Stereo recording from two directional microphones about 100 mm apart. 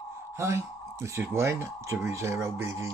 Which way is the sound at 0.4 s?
25° right (ahead or behind).